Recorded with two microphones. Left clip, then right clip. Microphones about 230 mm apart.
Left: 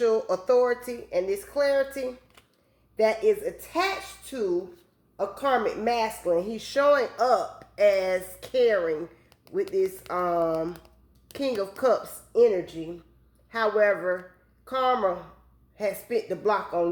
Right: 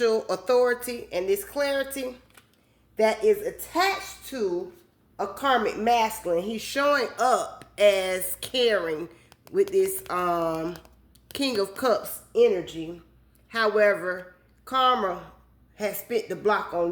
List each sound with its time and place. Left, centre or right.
0.0 s speech: right
5.1 s speech: right
10.1 s speech: right
13.5 s a woman's voice: right